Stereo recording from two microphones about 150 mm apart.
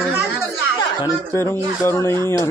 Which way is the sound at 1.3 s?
15° left (ahead or behind).